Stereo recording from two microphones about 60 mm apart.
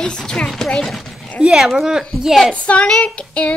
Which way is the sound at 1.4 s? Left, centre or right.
Centre.